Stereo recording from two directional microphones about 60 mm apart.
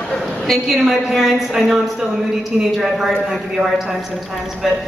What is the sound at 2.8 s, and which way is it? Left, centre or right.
Speech, centre.